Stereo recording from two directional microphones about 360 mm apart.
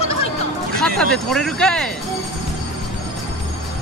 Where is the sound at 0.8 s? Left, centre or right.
Centre.